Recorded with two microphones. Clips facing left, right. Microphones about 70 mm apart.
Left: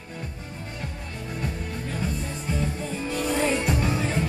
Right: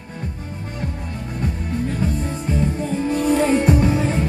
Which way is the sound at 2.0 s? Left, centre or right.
Right.